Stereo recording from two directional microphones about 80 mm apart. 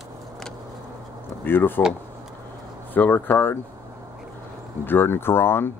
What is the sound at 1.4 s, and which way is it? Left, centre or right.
Speech, left.